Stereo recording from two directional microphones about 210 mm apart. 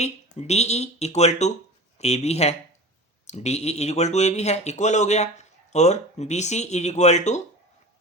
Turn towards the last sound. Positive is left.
turn(degrees=35)  # may be behind; listen again after turning